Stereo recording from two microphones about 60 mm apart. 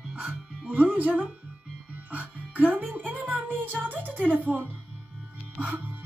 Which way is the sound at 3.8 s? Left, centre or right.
Right.